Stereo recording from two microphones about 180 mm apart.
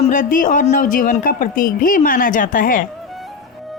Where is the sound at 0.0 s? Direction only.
45° left (ahead or behind).